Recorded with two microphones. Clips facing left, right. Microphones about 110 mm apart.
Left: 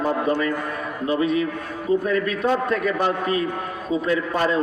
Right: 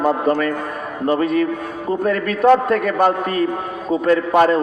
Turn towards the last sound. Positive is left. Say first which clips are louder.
# right 7 dB
turn(degrees=-55)  # may be behind; listen again after turning